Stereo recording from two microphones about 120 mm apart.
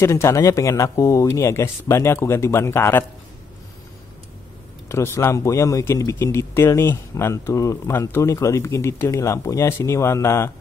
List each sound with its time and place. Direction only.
0.0 s speech: 25° left (ahead or behind)
4.8 s speech: 20° left (ahead or behind)